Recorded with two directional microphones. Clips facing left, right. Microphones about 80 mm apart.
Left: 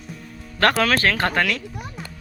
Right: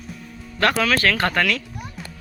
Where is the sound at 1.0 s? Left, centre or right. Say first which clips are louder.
Even; left.